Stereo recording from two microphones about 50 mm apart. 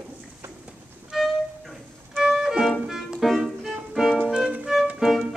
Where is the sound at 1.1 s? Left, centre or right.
Centre.